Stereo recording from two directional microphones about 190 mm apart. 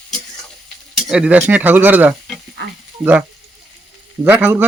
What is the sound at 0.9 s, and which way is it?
Speech, 5° right (ahead or behind).